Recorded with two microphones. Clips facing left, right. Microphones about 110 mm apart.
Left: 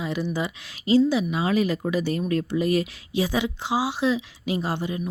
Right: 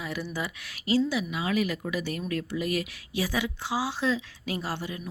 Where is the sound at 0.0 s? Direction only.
25° left (ahead or behind).